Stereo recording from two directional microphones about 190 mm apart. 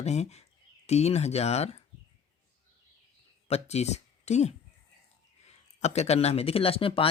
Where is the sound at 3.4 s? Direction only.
35° left (ahead or behind).